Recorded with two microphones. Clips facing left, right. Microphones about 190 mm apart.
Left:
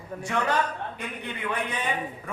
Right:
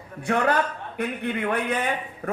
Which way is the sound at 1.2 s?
55° right (ahead or behind).